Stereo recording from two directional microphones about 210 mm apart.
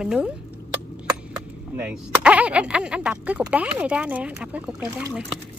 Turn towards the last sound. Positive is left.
turn(degrees=-5)  # may be behind; listen again after turning